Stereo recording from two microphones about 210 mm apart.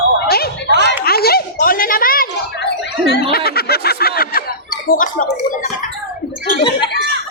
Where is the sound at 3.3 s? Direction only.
50° left (ahead or behind).